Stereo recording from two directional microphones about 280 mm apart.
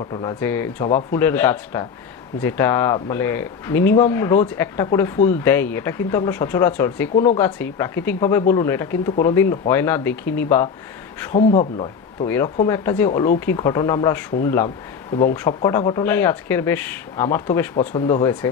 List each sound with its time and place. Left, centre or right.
0.1 s speech: centre
11.3 s speech: left
12.6 s speech: centre